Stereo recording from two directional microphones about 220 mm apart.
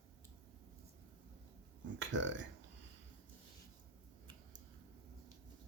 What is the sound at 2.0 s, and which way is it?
Speech, 55° right (ahead or behind).